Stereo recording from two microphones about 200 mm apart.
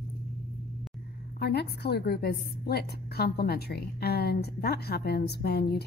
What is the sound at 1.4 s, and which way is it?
A woman's voice, 55° left (ahead or behind).